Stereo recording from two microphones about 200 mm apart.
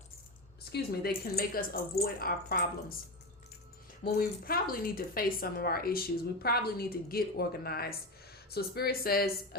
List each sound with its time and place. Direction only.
0.6 s speech: 50° left (ahead or behind)
4.0 s speech: 50° left (ahead or behind)